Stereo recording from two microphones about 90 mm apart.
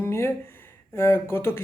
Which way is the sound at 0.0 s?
30° left (ahead or behind).